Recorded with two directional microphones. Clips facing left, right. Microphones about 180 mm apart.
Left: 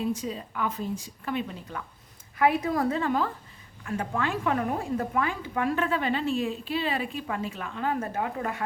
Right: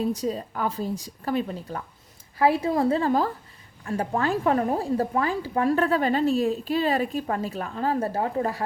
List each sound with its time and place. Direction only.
0.0 s a woman's voice: 40° right (ahead or behind)